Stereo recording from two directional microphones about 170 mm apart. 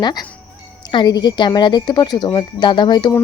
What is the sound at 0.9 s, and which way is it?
Speech, 25° left (ahead or behind).